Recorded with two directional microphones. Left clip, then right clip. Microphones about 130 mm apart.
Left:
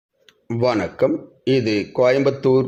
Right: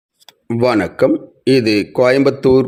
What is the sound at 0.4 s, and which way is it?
Speech, 45° right (ahead or behind).